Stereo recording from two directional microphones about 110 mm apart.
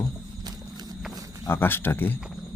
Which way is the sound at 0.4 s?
35° right (ahead or behind).